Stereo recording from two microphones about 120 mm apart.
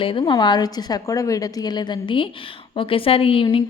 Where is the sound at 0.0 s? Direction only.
45° left (ahead or behind).